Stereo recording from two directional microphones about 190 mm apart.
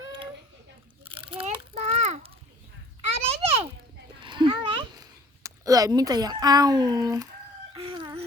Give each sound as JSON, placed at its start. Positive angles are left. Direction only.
{"t": 1.1, "sound": "crunch", "side_deg": -25}
{"t": 3.0, "sound": "children playing", "side_deg": -35}
{"t": 4.2, "sound": "a sound", "side_deg": -25}